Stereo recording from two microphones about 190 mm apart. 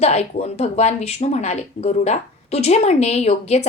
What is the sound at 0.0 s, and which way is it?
Speech, 35° left (ahead or behind).